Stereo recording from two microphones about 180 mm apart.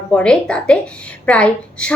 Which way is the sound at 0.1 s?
5° left (ahead or behind).